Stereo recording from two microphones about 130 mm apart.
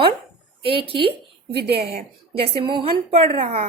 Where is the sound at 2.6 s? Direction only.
40° right (ahead or behind).